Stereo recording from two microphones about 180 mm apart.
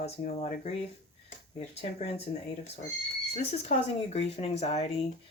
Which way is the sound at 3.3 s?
35° left (ahead or behind).